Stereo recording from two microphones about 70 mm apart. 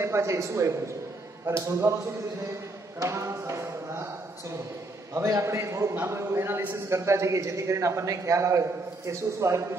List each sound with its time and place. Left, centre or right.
0.0 s a man's voice: right
3.0 s a sound: right
5.1 s a man's voice: right
5.9 s a man's voice: right